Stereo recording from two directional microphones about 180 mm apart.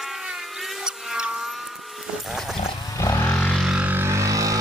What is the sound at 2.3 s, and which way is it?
Music, centre (ahead or behind).